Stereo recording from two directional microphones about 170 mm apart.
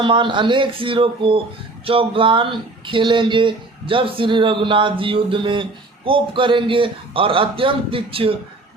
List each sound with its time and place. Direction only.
0.0 s a man's voice: 30° right (ahead or behind)